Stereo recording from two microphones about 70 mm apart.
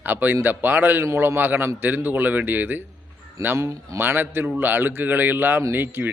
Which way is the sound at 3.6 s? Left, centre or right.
Right.